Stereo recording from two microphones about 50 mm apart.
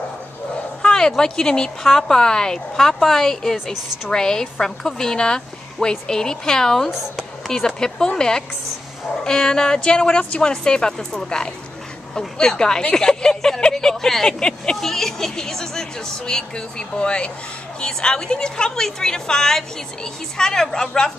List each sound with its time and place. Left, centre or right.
0.8 s speech: centre